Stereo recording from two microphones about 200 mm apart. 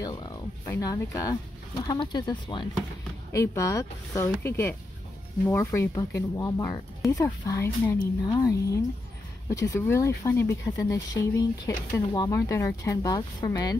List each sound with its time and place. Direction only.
0.0 s speech: 20° left (ahead or behind)